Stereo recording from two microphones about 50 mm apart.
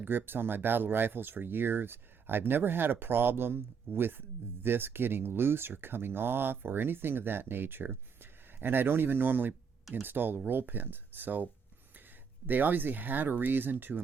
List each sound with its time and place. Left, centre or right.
0.0 s speech: right
12.5 s speech: right